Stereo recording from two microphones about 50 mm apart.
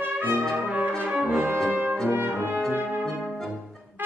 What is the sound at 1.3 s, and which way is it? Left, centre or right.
Brass instrument, right.